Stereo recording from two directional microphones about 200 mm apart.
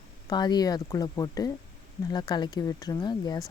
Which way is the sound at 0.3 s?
20° left (ahead or behind).